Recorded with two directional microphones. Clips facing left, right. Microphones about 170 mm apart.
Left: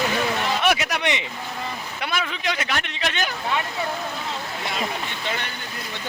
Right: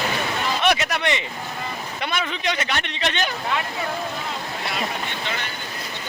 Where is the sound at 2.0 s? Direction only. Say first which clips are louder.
Right 1 dB; 5° left (ahead or behind).